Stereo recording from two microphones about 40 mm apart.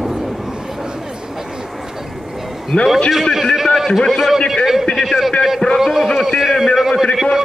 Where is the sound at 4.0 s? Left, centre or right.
Centre.